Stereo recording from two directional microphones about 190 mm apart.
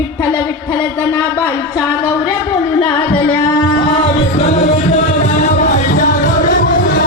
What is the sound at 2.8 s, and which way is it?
Music, 25° left (ahead or behind).